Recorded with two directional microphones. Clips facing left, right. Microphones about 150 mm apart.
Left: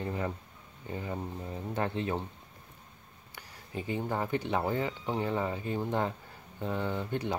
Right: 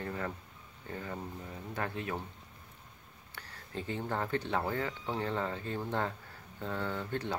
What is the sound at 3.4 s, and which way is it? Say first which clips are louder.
Speech: left 2 dB; 15° left (ahead or behind).